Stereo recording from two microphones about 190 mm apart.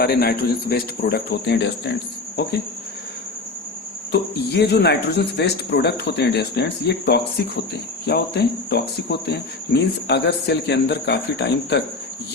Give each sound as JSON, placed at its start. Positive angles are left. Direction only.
{"t": 0.0, "sound": "speech", "side_deg": 55}
{"t": 4.1, "sound": "speech", "side_deg": 60}